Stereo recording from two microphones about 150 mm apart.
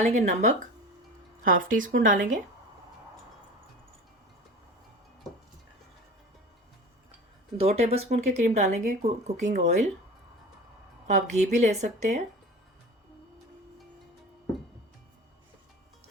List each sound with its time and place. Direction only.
0.2 s speech: 50° right (ahead or behind)
1.5 s a woman's voice: 65° right (ahead or behind)
7.6 s speech: 45° right (ahead or behind)
11.0 s speech: 50° right (ahead or behind)